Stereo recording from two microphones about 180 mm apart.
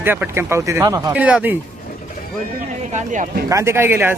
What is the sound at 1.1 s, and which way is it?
Speech, 5° right (ahead or behind).